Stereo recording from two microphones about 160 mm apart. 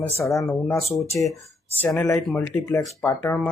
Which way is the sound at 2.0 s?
15° left (ahead or behind).